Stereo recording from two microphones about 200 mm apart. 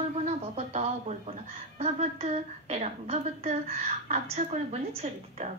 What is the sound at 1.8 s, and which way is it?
A woman's voice, 35° right (ahead or behind).